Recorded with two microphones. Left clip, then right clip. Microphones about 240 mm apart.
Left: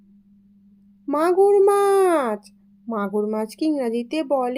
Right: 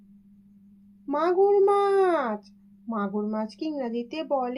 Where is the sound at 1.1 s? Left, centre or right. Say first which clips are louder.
Left 5 dB; left.